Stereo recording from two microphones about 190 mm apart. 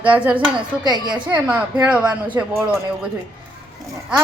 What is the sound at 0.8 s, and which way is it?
Music, 20° right (ahead or behind).